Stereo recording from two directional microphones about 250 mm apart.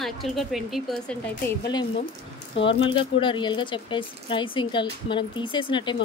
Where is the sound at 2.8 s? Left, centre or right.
Left.